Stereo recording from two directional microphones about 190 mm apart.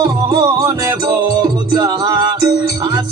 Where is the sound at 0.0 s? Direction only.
20° right (ahead or behind).